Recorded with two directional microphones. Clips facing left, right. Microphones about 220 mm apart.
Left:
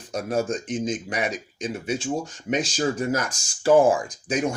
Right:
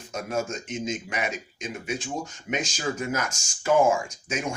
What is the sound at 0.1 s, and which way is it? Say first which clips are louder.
Speech: left 4 dB; 35° left (ahead or behind).